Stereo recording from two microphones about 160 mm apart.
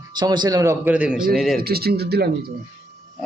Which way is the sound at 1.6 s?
75° right (ahead or behind).